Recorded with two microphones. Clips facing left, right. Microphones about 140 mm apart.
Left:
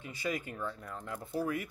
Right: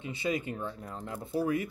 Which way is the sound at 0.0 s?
25° right (ahead or behind).